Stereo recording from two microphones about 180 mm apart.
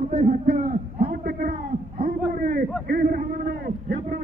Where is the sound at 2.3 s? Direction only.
50° right (ahead or behind).